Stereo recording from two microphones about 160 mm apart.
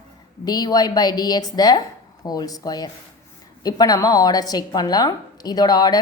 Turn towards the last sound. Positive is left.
turn(degrees=25)  # may be behind; listen again after turning